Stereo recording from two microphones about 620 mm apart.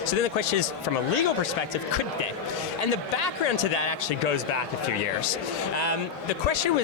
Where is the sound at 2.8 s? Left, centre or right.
Left.